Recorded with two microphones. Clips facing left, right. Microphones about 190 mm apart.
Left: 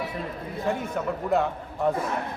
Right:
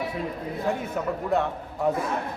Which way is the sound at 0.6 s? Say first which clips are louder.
Even; centre (ahead or behind).